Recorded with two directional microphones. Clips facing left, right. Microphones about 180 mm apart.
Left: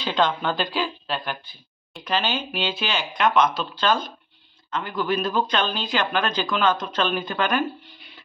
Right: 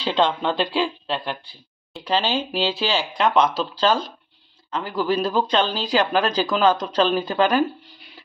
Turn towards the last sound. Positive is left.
turn(degrees=-35)  # may be behind; listen again after turning